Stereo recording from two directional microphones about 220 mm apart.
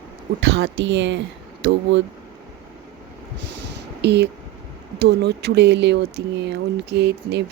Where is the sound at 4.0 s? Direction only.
50° right (ahead or behind).